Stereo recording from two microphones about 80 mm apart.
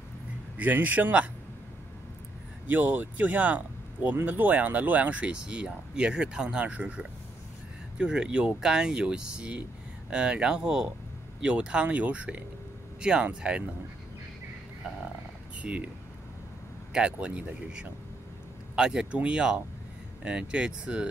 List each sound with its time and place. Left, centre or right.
0.6 s speech: right
2.6 s speech: right
16.9 s speech: centre